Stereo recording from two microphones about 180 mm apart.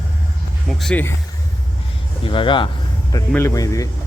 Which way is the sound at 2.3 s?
30° left (ahead or behind).